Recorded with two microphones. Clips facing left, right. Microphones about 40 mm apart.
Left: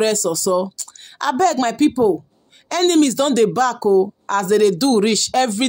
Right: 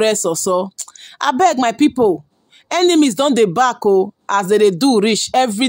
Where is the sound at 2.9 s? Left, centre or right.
Right.